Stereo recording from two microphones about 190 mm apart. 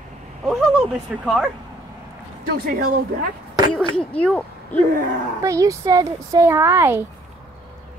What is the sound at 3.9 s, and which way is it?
Speech, 5° left (ahead or behind).